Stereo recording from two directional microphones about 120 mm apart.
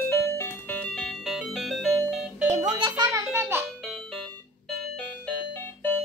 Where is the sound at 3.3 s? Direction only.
20° right (ahead or behind).